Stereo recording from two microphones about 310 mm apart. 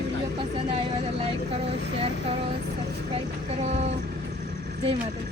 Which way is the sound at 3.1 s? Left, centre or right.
Centre.